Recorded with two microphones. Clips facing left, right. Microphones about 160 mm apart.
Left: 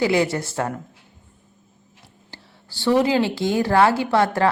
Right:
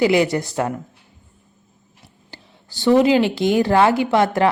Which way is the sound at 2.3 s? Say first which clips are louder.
Right 1 dB; 15° right (ahead or behind).